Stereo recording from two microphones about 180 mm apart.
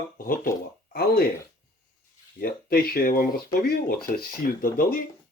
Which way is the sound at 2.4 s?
55° left (ahead or behind).